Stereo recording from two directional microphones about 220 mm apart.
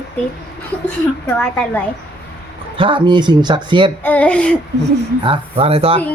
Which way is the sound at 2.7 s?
20° right (ahead or behind).